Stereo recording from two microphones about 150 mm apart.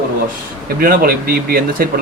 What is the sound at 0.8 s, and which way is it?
Speech, 75° right (ahead or behind).